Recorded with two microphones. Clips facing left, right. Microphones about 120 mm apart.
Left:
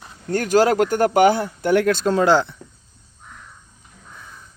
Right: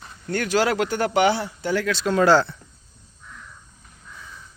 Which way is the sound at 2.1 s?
20° left (ahead or behind).